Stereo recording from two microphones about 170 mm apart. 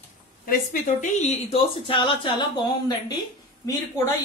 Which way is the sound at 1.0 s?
40° left (ahead or behind).